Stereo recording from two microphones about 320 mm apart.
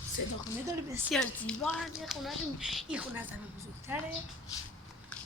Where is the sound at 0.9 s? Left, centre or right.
Centre.